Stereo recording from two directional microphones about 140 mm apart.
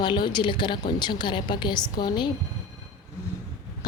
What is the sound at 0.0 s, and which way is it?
A woman's voice, 35° left (ahead or behind).